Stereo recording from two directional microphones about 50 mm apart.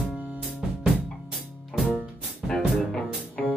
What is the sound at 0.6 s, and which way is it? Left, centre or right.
Music, centre.